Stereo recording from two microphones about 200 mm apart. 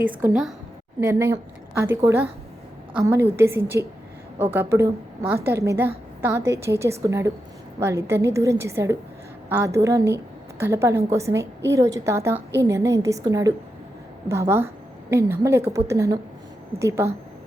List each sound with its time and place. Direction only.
1.0 s a woman's voice: 10° right (ahead or behind)